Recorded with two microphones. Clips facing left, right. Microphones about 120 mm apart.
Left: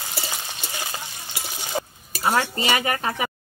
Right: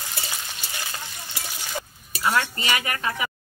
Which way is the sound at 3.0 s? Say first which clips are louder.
Left 2 dB; 40° left (ahead or behind).